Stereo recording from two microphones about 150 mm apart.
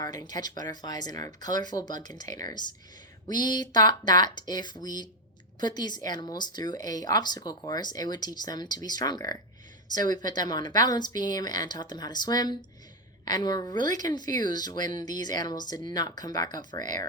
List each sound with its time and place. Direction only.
0.0 s speech: 25° left (ahead or behind)